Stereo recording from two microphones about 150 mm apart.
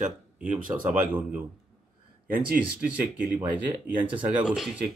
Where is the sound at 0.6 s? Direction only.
65° right (ahead or behind).